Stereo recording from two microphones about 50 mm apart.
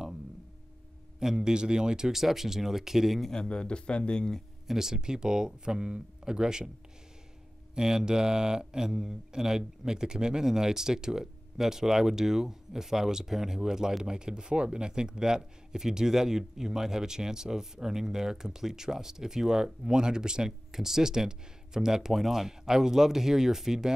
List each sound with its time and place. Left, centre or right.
1.2 s speech: centre
3.3 s speech: centre
4.6 s speech: centre
7.7 s speech: centre